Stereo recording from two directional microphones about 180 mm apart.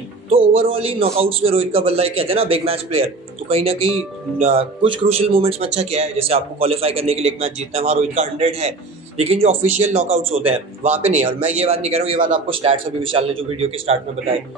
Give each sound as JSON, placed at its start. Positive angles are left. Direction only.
{"t": 0.3, "sound": "a man's voice", "side_deg": -30}